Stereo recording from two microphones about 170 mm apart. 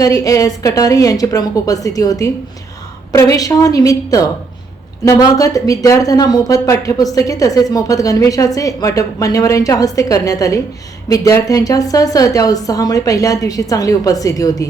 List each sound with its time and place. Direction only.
0.0 s a woman's voice: 20° left (ahead or behind)